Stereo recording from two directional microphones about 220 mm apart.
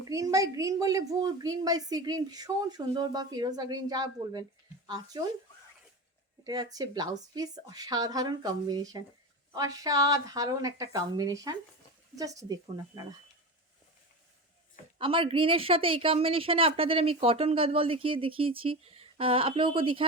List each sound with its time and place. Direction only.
0.1 s a woman's voice: 15° right (ahead or behind)
6.4 s a woman's voice: 15° right (ahead or behind)
14.9 s a woman's voice: 25° right (ahead or behind)